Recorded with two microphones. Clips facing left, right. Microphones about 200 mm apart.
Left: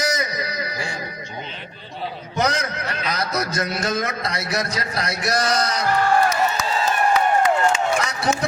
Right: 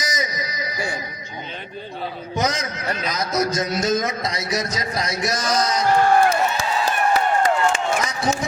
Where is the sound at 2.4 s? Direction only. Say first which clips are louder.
Left 1 dB; 60° left (ahead or behind).